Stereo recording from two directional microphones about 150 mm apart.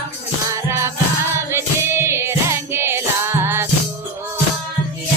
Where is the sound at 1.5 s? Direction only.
15° right (ahead or behind).